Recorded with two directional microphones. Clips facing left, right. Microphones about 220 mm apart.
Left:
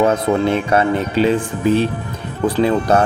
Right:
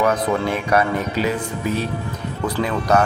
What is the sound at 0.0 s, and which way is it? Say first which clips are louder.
Speech: left 4 dB; 25° left (ahead or behind).